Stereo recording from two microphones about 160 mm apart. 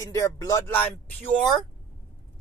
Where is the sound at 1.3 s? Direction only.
5° left (ahead or behind).